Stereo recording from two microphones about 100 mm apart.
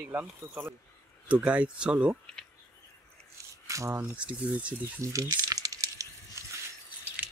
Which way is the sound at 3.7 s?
30° right (ahead or behind).